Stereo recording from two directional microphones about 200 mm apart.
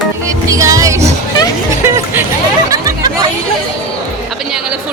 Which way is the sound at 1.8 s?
10° right (ahead or behind).